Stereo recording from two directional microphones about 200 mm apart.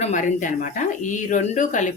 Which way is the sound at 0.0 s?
40° left (ahead or behind).